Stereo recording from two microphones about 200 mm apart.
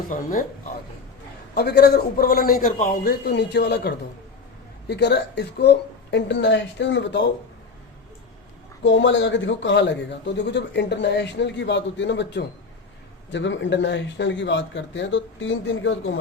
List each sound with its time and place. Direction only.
0.1 s a man's voice: 45° left (ahead or behind)
1.5 s a man's voice: 55° left (ahead or behind)
8.8 s a man's voice: 65° left (ahead or behind)